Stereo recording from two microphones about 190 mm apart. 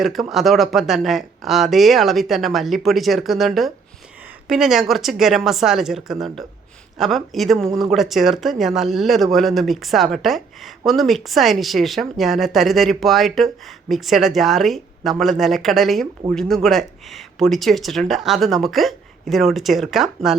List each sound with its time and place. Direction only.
0.0 s speech: centre (ahead or behind)